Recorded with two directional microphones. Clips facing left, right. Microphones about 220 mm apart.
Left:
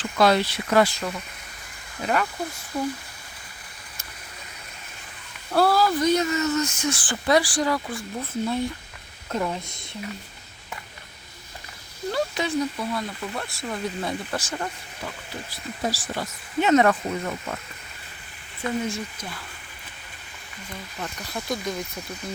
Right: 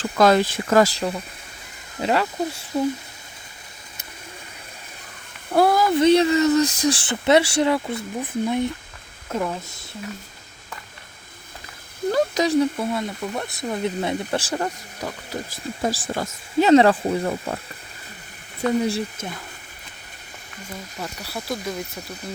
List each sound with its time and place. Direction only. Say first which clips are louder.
0.0 s speech: right 3 dB; 45° right (ahead or behind)
0.9 s speech: right 5 dB; 30° right (ahead or behind)
5.5 s speech: right 3 dB; 20° right (ahead or behind)
9.3 s speech: right 1 dB; 5° right (ahead or behind)
12.1 s a sound: right 6 dB; 40° right (ahead or behind)
12.8 s speech: right 4 dB; 25° right (ahead or behind)
14.3 s speech: right 5 dB; 35° right (ahead or behind)
18.8 s speech: right 6 dB; 35° right (ahead or behind)
21.0 s speech: even; 5° right (ahead or behind)